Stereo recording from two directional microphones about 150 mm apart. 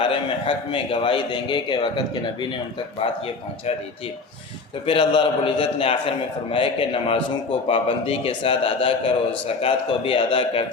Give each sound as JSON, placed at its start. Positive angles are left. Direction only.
{"t": 0.0, "sound": "a man's voice", "side_deg": 35}
{"t": 3.0, "sound": "a man's voice", "side_deg": 40}
{"t": 4.9, "sound": "a man's voice", "side_deg": 35}